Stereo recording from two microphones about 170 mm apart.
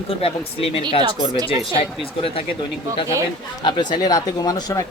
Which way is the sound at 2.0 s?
35° left (ahead or behind).